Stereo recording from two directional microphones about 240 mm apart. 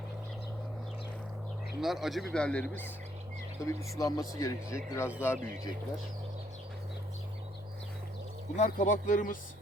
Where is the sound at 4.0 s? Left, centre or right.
Centre.